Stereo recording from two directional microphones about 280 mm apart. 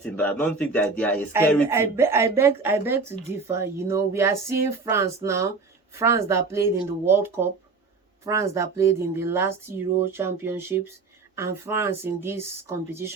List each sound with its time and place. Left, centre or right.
0.0 s speech: centre
1.7 s speech: centre